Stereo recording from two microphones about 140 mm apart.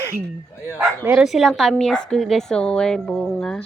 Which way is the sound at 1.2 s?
Centre (ahead or behind).